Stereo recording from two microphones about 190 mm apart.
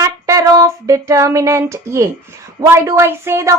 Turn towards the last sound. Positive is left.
turn(degrees=-15)  # may be behind; listen again after turning